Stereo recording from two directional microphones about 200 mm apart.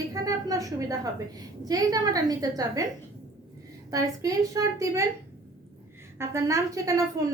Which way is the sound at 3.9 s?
15° right (ahead or behind).